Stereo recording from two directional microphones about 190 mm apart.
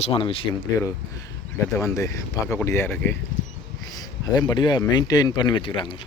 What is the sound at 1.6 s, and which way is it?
Speech, 15° left (ahead or behind).